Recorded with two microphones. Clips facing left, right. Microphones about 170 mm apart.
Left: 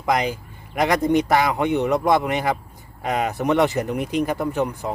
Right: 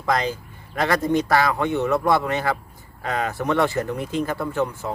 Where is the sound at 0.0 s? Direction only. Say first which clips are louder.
Left 1 dB; 15° left (ahead or behind).